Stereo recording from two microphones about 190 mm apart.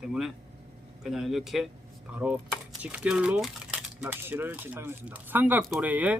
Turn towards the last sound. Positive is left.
turn(degrees=-10)  # may be behind; listen again after turning